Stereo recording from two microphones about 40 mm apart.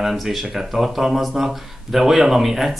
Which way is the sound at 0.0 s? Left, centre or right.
Centre.